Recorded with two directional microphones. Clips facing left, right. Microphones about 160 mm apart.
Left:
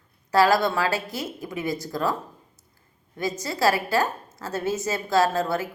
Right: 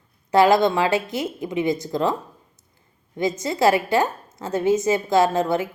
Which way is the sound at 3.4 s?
20° right (ahead or behind).